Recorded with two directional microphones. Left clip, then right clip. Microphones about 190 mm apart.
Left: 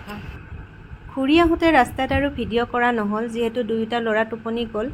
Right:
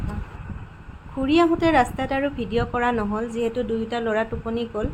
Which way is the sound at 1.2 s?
15° left (ahead or behind).